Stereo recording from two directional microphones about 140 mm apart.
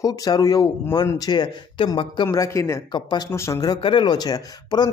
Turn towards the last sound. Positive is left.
turn(degrees=30)  # may be behind; listen again after turning